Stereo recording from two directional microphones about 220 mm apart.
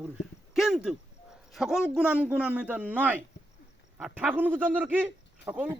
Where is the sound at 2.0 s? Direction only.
5° right (ahead or behind).